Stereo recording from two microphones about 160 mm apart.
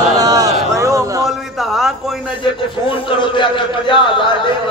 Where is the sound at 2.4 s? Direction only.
30° left (ahead or behind).